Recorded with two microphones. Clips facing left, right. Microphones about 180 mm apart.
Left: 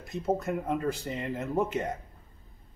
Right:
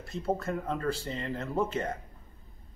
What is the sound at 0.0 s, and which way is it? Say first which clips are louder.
A man's voice: left 2 dB; 20° left (ahead or behind).